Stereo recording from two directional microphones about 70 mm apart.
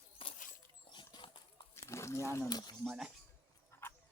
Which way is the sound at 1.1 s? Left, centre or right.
Left.